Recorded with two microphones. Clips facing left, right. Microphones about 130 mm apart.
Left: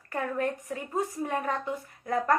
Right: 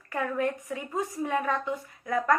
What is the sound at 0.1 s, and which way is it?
A woman's voice, 45° left (ahead or behind).